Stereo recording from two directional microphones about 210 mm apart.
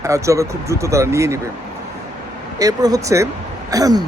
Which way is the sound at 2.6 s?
15° right (ahead or behind).